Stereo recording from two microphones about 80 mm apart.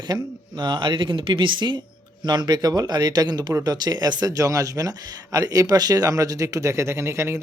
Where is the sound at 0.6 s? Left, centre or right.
Right.